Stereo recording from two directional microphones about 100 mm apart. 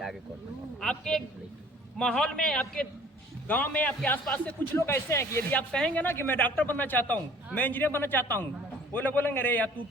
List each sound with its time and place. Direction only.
0.8 s a man's voice: 5° left (ahead or behind)
4.8 s a man's voice: 25° left (ahead or behind)